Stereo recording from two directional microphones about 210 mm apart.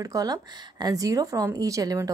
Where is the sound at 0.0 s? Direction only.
15° right (ahead or behind).